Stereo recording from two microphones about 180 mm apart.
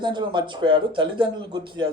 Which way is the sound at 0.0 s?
25° right (ahead or behind).